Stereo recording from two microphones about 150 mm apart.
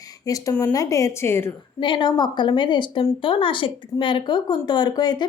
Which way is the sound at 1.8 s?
30° left (ahead or behind).